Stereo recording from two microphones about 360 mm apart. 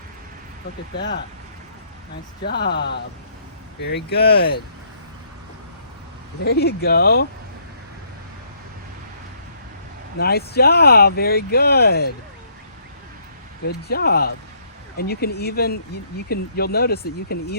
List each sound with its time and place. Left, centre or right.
0.9 s speech: left
2.4 s speech: left
6.4 s speech: left
10.2 s speech: left
13.8 s speech: left